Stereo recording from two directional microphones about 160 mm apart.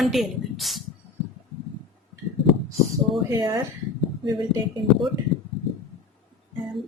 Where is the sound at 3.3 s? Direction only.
25° right (ahead or behind).